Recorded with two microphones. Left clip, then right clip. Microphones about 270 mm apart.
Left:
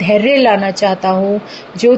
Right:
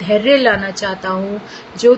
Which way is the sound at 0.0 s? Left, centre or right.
Centre.